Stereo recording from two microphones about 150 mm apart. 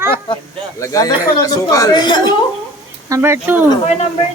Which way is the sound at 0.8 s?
25° left (ahead or behind).